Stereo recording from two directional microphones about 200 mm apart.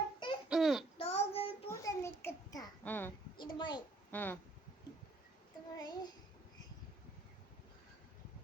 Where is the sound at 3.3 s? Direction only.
25° left (ahead or behind).